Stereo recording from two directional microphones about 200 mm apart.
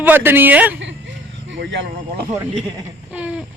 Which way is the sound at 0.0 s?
10° right (ahead or behind).